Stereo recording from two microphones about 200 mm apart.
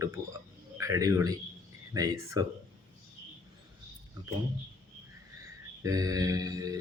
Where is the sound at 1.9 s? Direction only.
15° right (ahead or behind).